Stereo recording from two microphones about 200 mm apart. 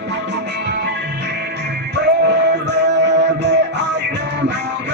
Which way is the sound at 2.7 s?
60° right (ahead or behind).